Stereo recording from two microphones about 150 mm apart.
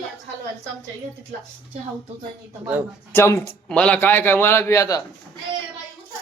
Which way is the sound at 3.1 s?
15° left (ahead or behind).